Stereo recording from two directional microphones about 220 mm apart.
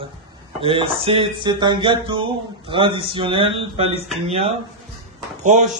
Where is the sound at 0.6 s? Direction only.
25° right (ahead or behind).